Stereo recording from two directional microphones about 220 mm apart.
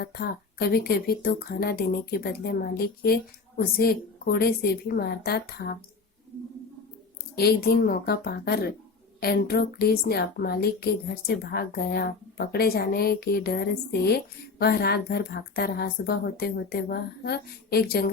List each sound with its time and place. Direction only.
0.0 s a woman's voice: 45° left (ahead or behind)
7.3 s a woman's voice: 45° left (ahead or behind)